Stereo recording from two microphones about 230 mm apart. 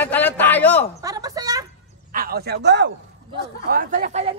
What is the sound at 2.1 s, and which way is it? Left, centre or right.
Speech, right.